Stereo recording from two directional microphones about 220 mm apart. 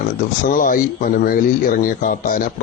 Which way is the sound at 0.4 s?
40° left (ahead or behind).